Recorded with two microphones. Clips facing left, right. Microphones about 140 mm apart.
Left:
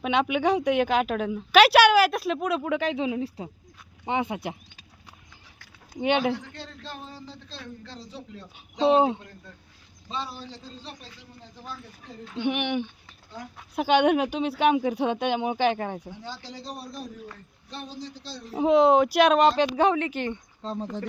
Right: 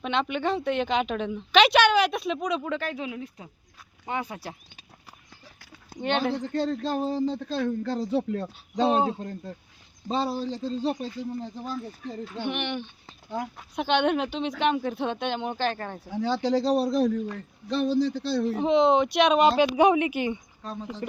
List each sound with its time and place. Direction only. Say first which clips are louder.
0.0 s a woman's voice: left 3 dB; 10° left (ahead or behind)
6.0 s a woman's voice: left 2 dB; 10° left (ahead or behind)
6.4 s a man's voice: right 14 dB; 40° right (ahead or behind)
9.2 s a man's voice: right 11 dB; 40° right (ahead or behind)
12.5 s a woman's voice: left 5 dB; 10° left (ahead or behind)
16.2 s a man's voice: right 15 dB; 75° right (ahead or behind); by 18.5 s 60° right (ahead or behind)
18.5 s speech: left 3 dB; 5° left (ahead or behind); by 20.4 s 10° right (ahead or behind)
20.6 s speech: left 4 dB; 25° left (ahead or behind)